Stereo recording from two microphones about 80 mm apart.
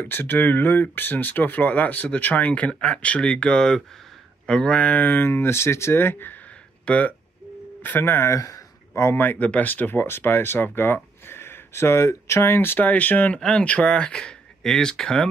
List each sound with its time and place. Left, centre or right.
0.0 s speech: left
8.4 s a sound: left
9.2 s speech: centre
13.4 s speech: centre